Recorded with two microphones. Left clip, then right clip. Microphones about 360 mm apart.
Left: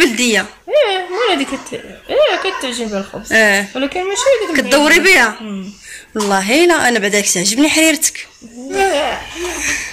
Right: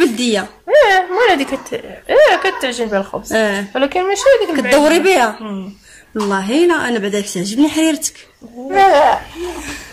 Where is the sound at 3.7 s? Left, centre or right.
Right.